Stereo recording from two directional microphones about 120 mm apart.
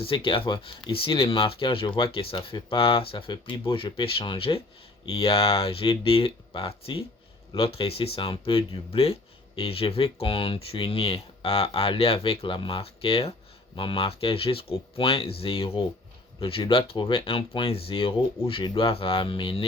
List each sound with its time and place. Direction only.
0.0 s speech: 50° left (ahead or behind)